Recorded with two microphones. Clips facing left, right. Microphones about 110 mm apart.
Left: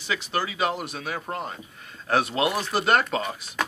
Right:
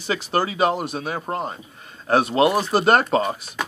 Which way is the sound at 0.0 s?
40° right (ahead or behind).